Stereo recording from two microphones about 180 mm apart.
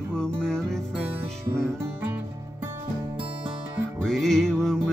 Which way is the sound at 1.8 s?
10° right (ahead or behind).